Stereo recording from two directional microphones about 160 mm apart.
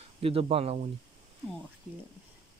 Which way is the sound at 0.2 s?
35° right (ahead or behind).